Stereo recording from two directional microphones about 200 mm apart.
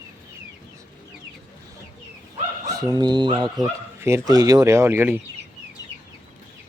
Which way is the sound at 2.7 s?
20° right (ahead or behind).